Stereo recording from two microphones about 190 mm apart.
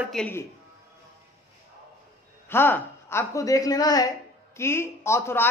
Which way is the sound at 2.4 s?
10° left (ahead or behind).